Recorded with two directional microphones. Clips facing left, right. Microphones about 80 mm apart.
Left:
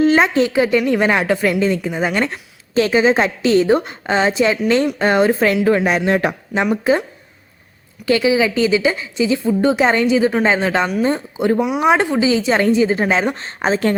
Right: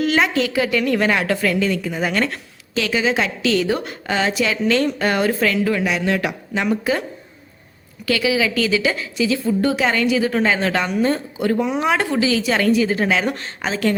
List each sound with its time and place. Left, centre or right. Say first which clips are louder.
0.0 s a woman's voice: left 5 dB; left
2.7 s a woman's voice: left 6 dB; left
8.0 s a woman's voice: left 4 dB; left
11.6 s a woman's voice: left 4 dB; centre; by 13.9 s left